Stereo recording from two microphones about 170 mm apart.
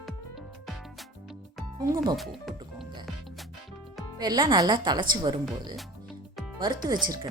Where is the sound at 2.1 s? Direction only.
Centre (ahead or behind).